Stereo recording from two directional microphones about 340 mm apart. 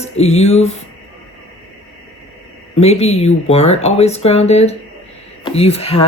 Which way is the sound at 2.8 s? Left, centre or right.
Centre.